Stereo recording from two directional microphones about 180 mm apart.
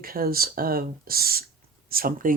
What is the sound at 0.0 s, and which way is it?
Speech, 55° right (ahead or behind).